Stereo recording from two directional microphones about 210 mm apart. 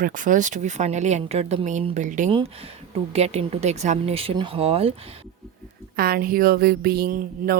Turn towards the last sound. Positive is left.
turn(degrees=-40)  # may be behind; listen again after turning